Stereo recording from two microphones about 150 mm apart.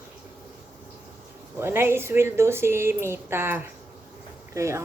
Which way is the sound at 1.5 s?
15° right (ahead or behind).